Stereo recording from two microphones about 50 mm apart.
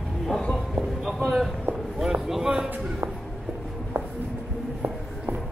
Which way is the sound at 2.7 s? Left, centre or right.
Right.